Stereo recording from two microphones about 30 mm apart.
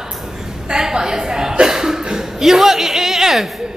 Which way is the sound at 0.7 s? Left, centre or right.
Centre.